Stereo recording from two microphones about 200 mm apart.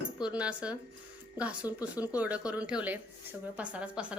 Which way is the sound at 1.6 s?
20° left (ahead or behind).